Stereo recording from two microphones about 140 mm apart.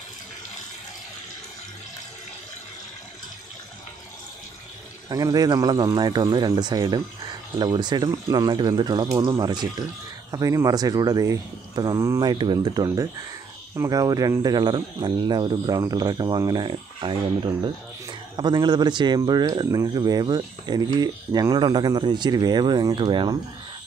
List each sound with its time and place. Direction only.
5.1 s speech: 25° right (ahead or behind)